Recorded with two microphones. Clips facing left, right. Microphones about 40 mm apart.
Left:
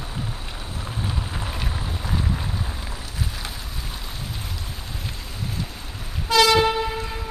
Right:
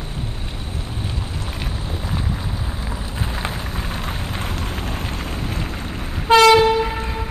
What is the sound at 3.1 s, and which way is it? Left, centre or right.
Rain, right.